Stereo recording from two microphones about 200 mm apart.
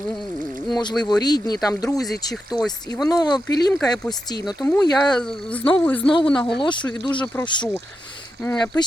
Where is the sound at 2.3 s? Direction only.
Centre (ahead or behind).